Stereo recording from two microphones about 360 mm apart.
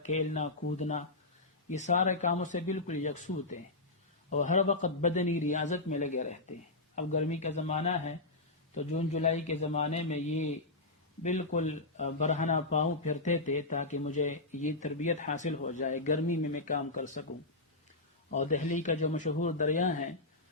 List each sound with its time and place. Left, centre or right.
0.0 s speech: centre
4.4 s speech: centre
18.3 s speech: centre